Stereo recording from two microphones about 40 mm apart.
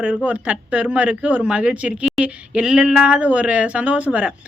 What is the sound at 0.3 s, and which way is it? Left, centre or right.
A woman's voice, right.